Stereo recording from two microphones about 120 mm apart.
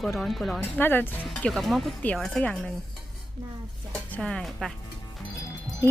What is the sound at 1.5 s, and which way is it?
A woman's voice, centre (ahead or behind).